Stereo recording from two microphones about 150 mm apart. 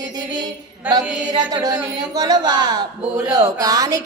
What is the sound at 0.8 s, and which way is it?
Mantra, 10° right (ahead or behind).